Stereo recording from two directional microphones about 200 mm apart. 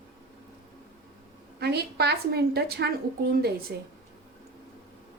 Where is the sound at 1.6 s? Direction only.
55° right (ahead or behind).